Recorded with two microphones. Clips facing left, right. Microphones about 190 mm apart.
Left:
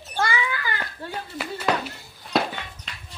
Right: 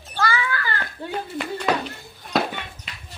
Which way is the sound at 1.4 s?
5° left (ahead or behind).